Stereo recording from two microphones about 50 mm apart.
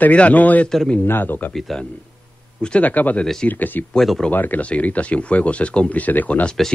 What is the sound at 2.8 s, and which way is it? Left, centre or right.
Speech, left.